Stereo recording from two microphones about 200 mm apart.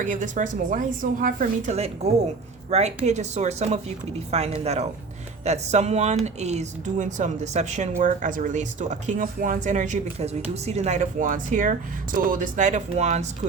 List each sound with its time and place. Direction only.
0.0 s speech: 40° right (ahead or behind)